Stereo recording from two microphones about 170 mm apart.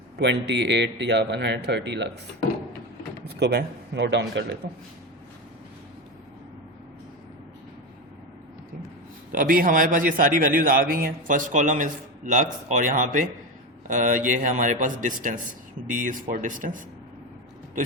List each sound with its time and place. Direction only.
0.2 s a man's voice: 90° right
3.3 s a man's voice: 85° right
9.3 s a man's voice: 55° right (ahead or behind)